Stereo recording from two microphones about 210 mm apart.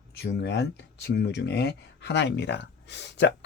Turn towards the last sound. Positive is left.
turn(degrees=55)  # may be behind; listen again after turning